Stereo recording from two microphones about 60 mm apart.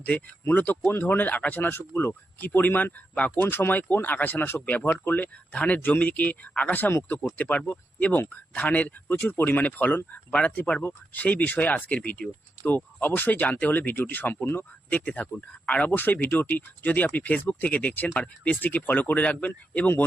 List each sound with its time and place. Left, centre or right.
0.4 s speech: left
9.3 s speech: left
9.6 s speech: left